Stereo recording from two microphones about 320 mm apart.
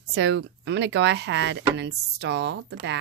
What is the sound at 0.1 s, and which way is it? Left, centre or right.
Speech, right.